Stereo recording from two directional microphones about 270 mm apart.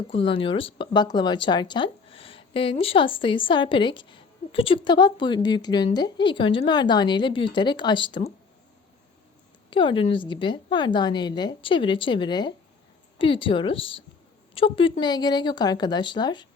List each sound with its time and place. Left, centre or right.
0.1 s speech: centre
9.6 s speech: centre